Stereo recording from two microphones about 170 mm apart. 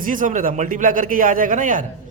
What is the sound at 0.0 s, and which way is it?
A man's voice, 50° right (ahead or behind).